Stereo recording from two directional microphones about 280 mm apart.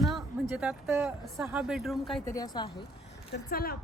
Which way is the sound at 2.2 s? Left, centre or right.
Centre.